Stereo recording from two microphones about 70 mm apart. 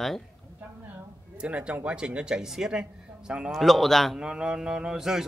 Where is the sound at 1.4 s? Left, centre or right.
Centre.